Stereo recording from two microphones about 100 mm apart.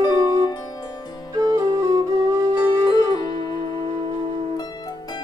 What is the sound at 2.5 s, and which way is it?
Music, 40° left (ahead or behind).